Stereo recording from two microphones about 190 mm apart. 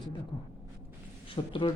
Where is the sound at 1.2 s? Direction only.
25° left (ahead or behind).